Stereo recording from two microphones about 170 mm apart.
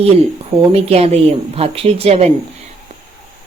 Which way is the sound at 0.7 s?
35° right (ahead or behind).